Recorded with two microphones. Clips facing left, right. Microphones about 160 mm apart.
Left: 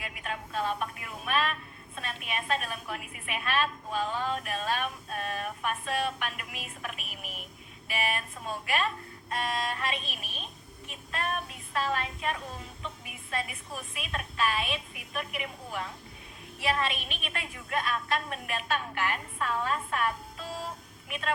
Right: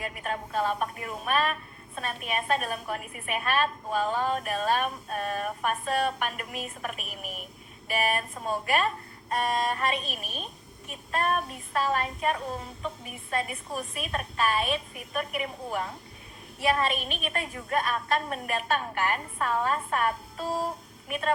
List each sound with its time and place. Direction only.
0.0 s a woman's voice: 45° right (ahead or behind)